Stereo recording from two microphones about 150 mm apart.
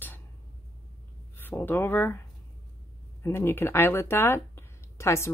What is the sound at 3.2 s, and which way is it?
Speech, 15° left (ahead or behind).